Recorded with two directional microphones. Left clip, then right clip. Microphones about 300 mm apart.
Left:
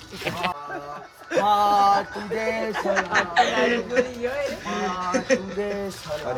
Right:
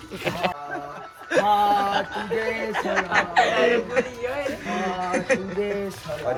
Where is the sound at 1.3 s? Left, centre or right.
Right.